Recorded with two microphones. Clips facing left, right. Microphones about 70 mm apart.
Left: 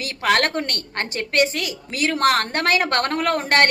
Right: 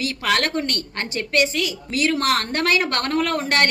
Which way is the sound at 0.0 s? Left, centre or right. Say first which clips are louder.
Left 2 dB; left.